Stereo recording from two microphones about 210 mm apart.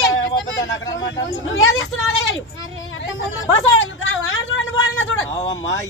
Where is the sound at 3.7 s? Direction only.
70° left (ahead or behind).